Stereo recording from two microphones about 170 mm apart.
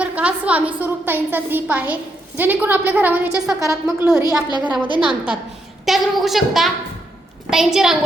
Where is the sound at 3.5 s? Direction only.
20° right (ahead or behind).